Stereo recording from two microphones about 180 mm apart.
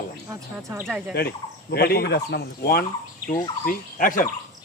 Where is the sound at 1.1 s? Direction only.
60° left (ahead or behind).